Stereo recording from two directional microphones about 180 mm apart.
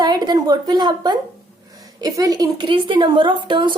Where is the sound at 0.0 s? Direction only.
25° right (ahead or behind).